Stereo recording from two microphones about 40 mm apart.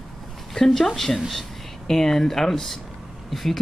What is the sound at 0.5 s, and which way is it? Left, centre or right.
Speech, centre.